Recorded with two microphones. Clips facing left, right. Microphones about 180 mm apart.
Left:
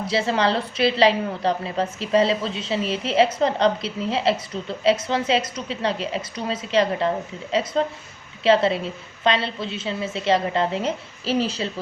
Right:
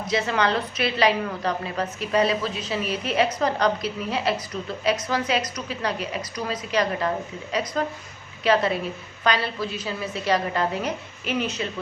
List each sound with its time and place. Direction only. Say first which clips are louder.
0.1 s a woman's voice: left 2 dB; 30° left (ahead or behind)